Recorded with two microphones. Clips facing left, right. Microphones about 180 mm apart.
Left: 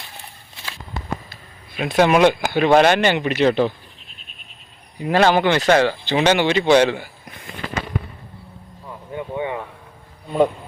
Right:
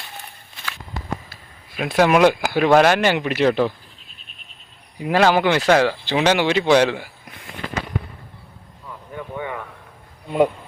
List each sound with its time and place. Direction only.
1.3 s speech: 5° right (ahead or behind)
4.9 s speech: 5° right (ahead or behind)
8.9 s vehicle: 20° left (ahead or behind)